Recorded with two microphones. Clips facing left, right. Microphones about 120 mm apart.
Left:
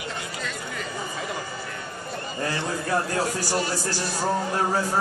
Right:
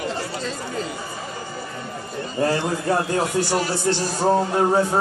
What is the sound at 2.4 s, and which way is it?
Speech, 30° right (ahead or behind).